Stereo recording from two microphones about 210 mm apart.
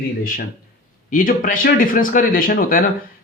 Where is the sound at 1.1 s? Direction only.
40° left (ahead or behind).